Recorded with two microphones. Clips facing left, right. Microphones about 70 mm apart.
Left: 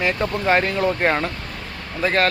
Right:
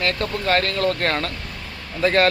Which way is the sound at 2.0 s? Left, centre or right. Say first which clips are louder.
Right 2 dB; centre.